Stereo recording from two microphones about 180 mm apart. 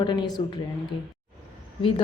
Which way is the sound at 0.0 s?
25° left (ahead or behind).